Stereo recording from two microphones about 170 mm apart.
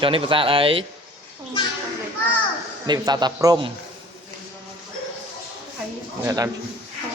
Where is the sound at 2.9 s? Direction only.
25° right (ahead or behind).